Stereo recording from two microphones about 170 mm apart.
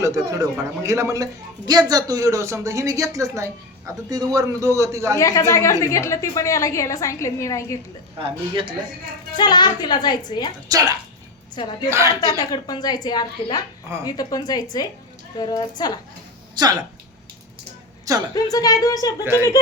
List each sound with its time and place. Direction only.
0.0 s a man's voice: 20° right (ahead or behind)
5.1 s a woman's voice: 20° left (ahead or behind)
8.2 s a man's voice: 30° right (ahead or behind)
9.3 s a child's voice: 25° left (ahead or behind)
10.7 s a man's voice: 20° right (ahead or behind)
11.5 s a child's voice: 25° left (ahead or behind)
11.9 s speech: 15° right (ahead or behind)
12.5 s a child's voice: 25° left (ahead or behind)
16.6 s a man's voice: 25° right (ahead or behind)
18.3 s a child's voice: 20° left (ahead or behind)